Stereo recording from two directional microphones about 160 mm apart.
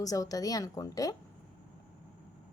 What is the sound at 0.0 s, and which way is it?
A woman's voice, 20° left (ahead or behind).